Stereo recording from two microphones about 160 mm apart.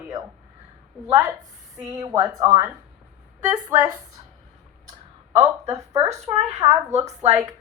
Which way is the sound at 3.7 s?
15° right (ahead or behind).